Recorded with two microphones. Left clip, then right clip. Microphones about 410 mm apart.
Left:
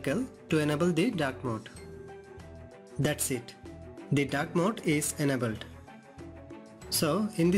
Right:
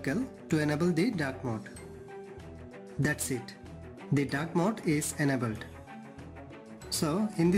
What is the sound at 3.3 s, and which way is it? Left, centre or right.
Speech, centre.